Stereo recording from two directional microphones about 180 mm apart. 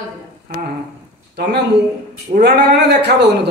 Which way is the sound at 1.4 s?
70° right (ahead or behind).